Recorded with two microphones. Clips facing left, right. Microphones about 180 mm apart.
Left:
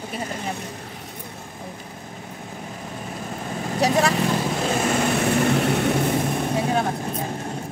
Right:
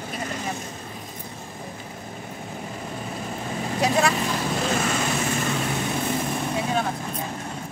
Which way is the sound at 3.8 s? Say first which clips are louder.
Left 2 dB; 35° left (ahead or behind).